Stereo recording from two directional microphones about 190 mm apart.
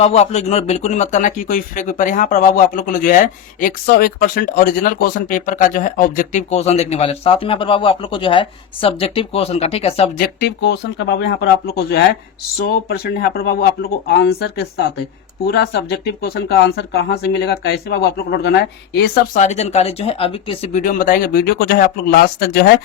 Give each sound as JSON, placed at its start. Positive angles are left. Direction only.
{"t": 0.0, "sound": "speech", "side_deg": 35}
{"t": 10.2, "sound": "speech", "side_deg": 60}
{"t": 19.3, "sound": "speech", "side_deg": 40}